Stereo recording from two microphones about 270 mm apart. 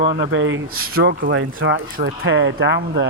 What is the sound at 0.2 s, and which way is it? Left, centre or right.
Speech, right.